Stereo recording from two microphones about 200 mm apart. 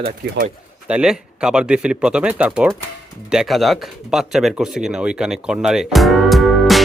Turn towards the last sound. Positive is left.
turn(degrees=0)  # may be behind; listen again after turning